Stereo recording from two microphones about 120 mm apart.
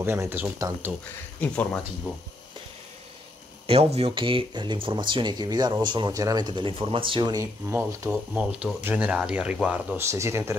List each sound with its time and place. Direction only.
0.0 s speech: 20° right (ahead or behind)
1.1 s speech: 15° left (ahead or behind)
3.6 s speech: 55° right (ahead or behind); by 7.4 s 40° right (ahead or behind)
7.6 s speech: 25° right (ahead or behind)
8.1 s speech: 10° right (ahead or behind)
9.9 s speech: 20° right (ahead or behind)